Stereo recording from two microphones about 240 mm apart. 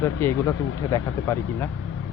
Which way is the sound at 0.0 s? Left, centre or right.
Centre.